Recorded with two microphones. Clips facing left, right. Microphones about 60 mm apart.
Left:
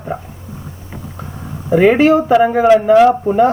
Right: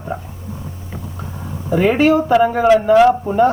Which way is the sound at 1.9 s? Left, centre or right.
Left.